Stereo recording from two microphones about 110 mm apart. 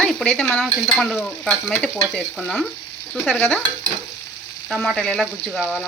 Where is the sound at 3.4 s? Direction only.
5° left (ahead or behind).